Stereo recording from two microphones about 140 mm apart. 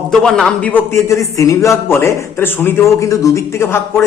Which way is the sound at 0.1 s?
5° left (ahead or behind).